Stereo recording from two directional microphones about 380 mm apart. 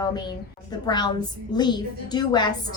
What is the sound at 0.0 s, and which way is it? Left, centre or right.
A child's voice, centre.